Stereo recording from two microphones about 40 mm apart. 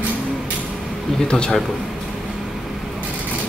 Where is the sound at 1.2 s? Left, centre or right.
Left.